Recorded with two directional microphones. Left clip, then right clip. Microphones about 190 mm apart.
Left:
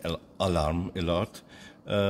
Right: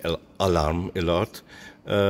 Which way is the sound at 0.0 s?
30° right (ahead or behind).